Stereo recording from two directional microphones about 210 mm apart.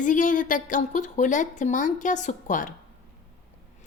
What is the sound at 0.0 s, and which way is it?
A woman's voice, 40° left (ahead or behind).